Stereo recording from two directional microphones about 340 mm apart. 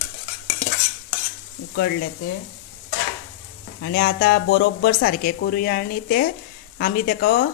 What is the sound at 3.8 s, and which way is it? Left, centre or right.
A woman's voice, left.